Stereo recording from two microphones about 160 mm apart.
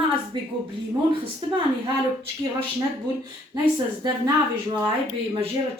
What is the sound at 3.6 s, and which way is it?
Speech, 25° right (ahead or behind).